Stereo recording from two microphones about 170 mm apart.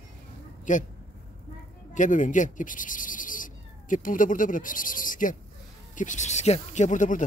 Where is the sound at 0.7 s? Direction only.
45° left (ahead or behind).